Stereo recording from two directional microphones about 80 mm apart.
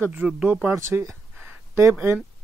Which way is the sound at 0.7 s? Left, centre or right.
Right.